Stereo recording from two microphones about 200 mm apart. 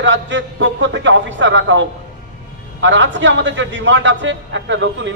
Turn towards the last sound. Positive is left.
turn(degrees=-65)  # may be behind; listen again after turning